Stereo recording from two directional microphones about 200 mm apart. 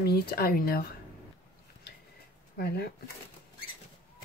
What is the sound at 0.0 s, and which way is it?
Speech, 50° left (ahead or behind).